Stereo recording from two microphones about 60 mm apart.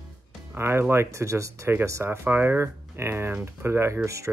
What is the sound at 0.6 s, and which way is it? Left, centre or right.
Speech, right.